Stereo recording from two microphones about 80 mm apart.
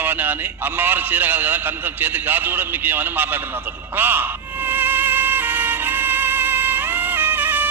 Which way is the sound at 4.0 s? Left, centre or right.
Right.